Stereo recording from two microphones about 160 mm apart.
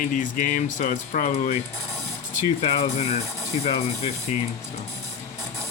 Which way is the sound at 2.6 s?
40° left (ahead or behind).